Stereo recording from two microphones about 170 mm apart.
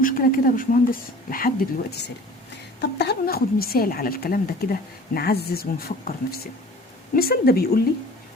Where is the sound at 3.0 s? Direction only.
70° left (ahead or behind).